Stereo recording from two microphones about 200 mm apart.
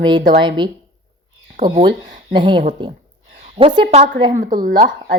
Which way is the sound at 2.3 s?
25° right (ahead or behind).